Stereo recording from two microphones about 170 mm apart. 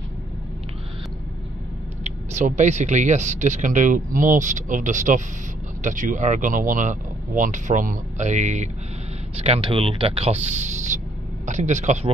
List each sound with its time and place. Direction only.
2.0 s speech: 45° right (ahead or behind)